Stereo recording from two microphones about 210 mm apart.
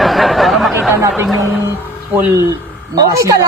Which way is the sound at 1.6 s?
15° right (ahead or behind).